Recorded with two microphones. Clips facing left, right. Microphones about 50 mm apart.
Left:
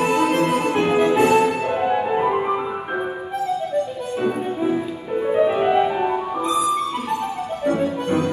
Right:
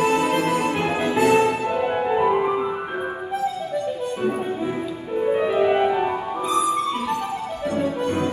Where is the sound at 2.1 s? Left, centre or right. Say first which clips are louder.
Even; centre.